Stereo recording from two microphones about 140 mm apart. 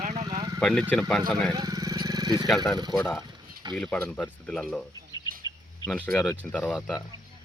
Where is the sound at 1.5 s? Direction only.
25° right (ahead or behind).